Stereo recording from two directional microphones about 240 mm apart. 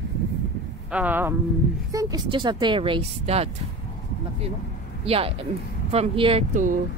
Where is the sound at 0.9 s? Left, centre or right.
Centre; by 3.5 s right.